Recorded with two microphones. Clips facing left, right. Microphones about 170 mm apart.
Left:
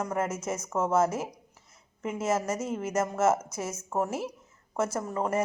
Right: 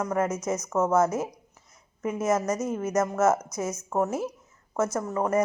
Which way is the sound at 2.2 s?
25° left (ahead or behind).